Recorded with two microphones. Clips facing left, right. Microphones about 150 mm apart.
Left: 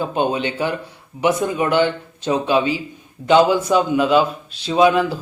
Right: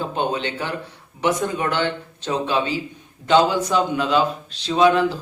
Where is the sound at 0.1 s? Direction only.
15° left (ahead or behind).